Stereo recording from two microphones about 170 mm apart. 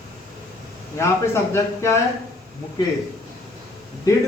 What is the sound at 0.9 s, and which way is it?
A man's voice, 15° left (ahead or behind).